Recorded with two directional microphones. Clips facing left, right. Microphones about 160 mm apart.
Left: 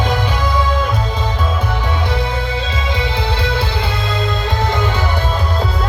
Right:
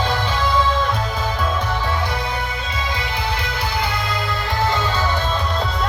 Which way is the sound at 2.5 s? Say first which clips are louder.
Left 6 dB; 90° left.